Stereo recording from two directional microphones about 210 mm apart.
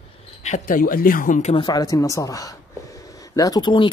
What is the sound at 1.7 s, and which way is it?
Speech, 15° left (ahead or behind).